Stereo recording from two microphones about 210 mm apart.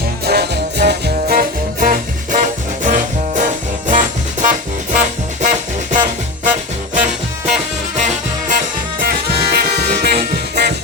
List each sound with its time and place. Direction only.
0.3 s music: 50° right (ahead or behind)
7.0 s music: centre (ahead or behind)
7.9 s music: 35° right (ahead or behind)